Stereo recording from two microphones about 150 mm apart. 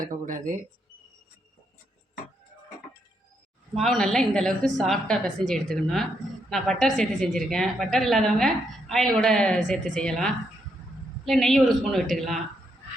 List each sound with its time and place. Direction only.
0.1 s speech: 60° right (ahead or behind)
3.8 s a woman's voice: centre (ahead or behind)